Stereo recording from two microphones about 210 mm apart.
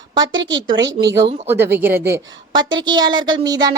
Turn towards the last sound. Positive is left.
turn(degrees=-20)  # may be behind; listen again after turning